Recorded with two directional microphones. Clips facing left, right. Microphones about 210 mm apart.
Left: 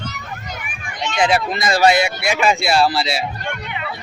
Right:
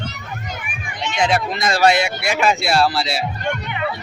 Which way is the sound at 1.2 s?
5° left (ahead or behind).